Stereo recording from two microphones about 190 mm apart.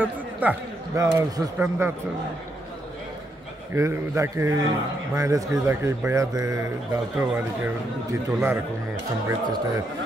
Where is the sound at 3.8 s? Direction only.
15° right (ahead or behind).